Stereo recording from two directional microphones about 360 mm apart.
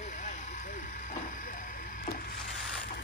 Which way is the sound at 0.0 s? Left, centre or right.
Centre.